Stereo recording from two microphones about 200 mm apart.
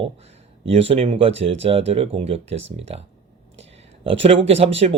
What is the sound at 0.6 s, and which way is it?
Speech, 30° right (ahead or behind).